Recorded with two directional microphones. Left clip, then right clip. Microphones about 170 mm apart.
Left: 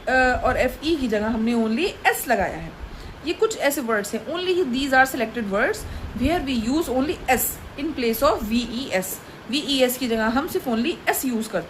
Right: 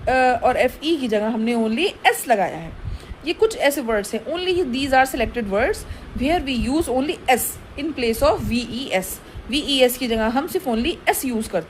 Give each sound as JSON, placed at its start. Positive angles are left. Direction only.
{"t": 0.0, "sound": "a woman's voice", "side_deg": -45}